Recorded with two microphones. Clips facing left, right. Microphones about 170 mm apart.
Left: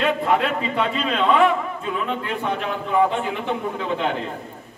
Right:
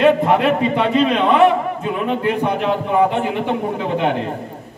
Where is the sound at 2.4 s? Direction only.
70° right (ahead or behind).